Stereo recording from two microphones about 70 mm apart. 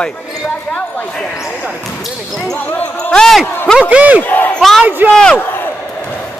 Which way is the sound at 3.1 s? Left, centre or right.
Centre.